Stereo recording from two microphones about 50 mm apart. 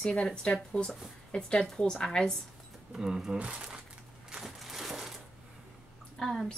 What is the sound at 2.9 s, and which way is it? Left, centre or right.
Speech, centre.